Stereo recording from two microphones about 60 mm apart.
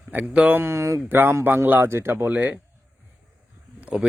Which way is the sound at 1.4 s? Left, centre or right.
Right.